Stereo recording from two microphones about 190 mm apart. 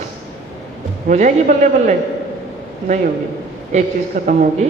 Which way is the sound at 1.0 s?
40° right (ahead or behind).